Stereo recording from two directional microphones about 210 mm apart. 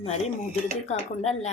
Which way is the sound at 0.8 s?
30° left (ahead or behind).